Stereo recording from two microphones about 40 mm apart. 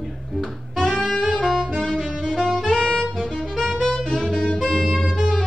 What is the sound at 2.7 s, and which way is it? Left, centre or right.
Saxophone, centre.